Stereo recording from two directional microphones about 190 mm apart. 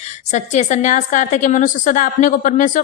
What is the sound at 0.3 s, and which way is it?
A woman's voice, 40° left (ahead or behind).